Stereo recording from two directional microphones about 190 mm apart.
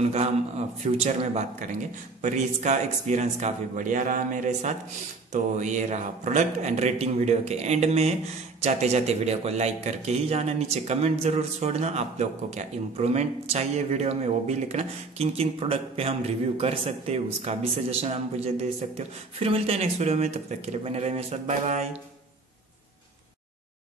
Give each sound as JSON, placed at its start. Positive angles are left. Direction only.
{"t": 0.0, "sound": "a man's voice", "side_deg": -35}